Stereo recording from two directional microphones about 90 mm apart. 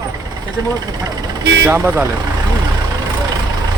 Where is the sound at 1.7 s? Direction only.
20° right (ahead or behind).